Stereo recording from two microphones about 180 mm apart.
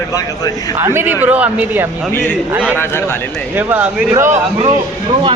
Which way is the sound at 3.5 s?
10° right (ahead or behind).